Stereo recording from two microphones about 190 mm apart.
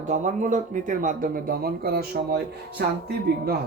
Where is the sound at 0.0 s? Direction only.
40° right (ahead or behind).